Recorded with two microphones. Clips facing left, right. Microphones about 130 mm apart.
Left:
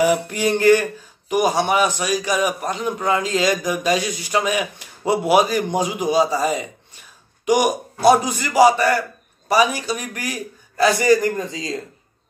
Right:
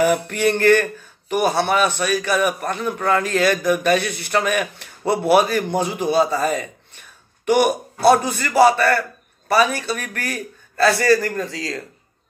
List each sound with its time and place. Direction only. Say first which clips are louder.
0.4 s a man's voice: even; 15° left (ahead or behind)